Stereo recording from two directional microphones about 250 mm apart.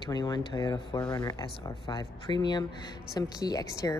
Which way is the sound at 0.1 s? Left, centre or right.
Centre.